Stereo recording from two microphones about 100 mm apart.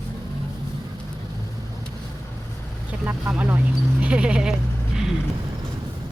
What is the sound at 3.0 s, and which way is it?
Speech, 20° right (ahead or behind).